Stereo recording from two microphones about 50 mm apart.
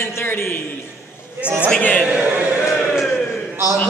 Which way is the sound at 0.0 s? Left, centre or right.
Left.